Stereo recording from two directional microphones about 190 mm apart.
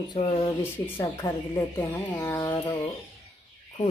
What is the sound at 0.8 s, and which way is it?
Speech, 15° left (ahead or behind).